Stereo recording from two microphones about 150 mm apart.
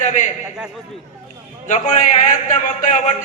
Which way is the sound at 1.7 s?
55° left (ahead or behind).